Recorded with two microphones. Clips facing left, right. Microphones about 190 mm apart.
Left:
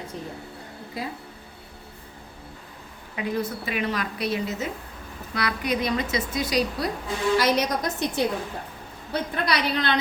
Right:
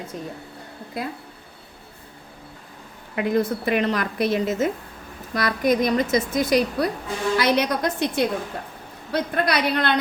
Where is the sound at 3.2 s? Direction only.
55° right (ahead or behind).